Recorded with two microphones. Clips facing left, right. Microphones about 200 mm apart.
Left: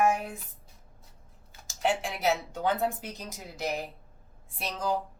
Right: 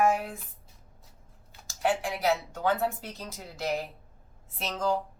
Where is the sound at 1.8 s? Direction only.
20° left (ahead or behind).